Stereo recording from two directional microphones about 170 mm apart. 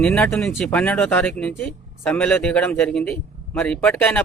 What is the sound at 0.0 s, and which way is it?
Speech, 5° left (ahead or behind).